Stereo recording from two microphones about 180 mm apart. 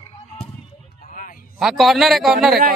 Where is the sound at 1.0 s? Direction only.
50° left (ahead or behind).